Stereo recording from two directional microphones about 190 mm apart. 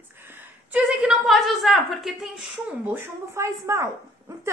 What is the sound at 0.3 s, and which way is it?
A woman's voice, 10° right (ahead or behind).